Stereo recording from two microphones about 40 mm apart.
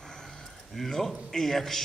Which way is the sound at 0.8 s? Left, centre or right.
Centre.